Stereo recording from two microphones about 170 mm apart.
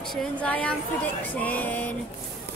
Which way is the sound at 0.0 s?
5° left (ahead or behind).